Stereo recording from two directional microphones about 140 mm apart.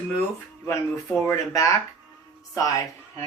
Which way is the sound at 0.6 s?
20° left (ahead or behind).